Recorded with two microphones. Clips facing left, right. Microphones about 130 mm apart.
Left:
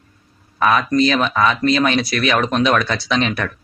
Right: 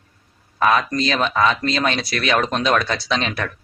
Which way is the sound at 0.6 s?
30° right (ahead or behind).